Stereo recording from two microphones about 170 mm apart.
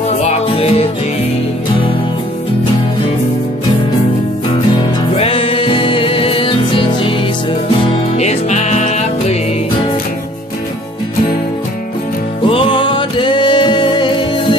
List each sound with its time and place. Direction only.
0.2 s music: 35° left (ahead or behind)
5.1 s music: 35° left (ahead or behind)
12.4 s music: 30° left (ahead or behind)